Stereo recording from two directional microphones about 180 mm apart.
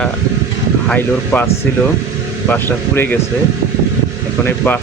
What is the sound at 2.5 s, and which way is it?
Speech, 10° left (ahead or behind).